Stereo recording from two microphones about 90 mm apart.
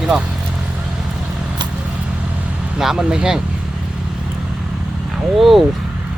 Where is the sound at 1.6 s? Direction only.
60° right (ahead or behind).